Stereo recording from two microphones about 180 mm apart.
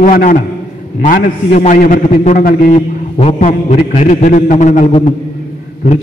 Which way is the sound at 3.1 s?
35° left (ahead or behind).